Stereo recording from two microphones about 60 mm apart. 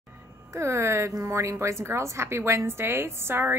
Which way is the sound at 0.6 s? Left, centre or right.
Right.